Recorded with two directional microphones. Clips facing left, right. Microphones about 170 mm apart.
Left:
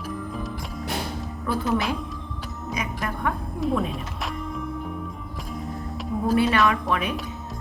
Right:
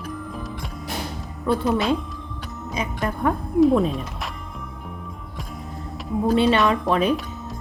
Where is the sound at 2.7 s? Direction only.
30° right (ahead or behind).